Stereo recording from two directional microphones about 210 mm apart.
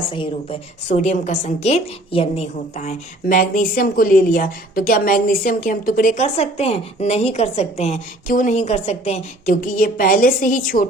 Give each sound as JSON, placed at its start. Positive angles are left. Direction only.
{"t": 0.1, "sound": "a woman's voice", "side_deg": 25}